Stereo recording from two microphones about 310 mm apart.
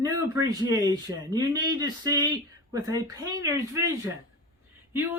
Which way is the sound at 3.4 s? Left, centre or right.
Centre.